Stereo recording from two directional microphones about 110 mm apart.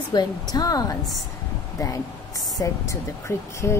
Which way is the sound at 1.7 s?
30° left (ahead or behind).